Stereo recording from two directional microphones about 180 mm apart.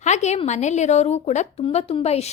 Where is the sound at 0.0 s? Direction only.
40° left (ahead or behind).